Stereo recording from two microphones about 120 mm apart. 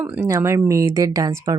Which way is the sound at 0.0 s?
25° right (ahead or behind).